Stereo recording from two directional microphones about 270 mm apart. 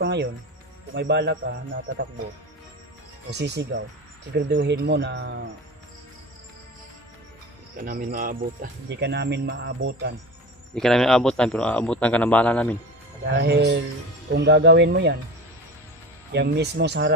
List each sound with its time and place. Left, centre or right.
0.0 s speech: right
3.3 s speech: right
7.7 s speech: right
10.7 s a man's voice: centre
13.3 s speech: right
16.3 s speech: right